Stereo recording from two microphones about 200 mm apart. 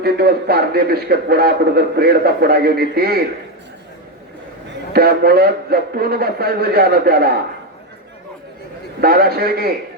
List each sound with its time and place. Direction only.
0.0 s a man's voice: 50° right (ahead or behind)
4.7 s a man's voice: 50° right (ahead or behind)
9.0 s a man's voice: 50° right (ahead or behind)